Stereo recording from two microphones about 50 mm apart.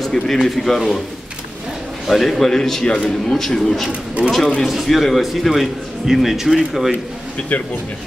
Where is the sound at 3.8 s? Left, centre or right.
Right.